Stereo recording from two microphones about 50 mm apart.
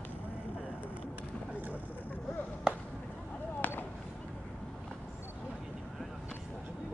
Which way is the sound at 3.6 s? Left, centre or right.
Left.